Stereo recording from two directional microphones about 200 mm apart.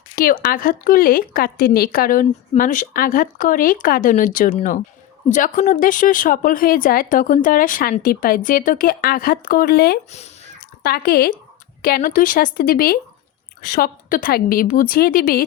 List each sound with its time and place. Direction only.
0.2 s speech: 45° left (ahead or behind)
10.1 s a sound: 35° left (ahead or behind)
10.8 s speech: 50° left (ahead or behind)